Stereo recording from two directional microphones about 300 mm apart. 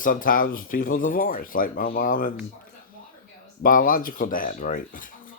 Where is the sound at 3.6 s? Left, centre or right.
Left.